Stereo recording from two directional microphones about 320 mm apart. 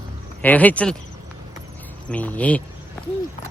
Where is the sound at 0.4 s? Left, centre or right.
Centre.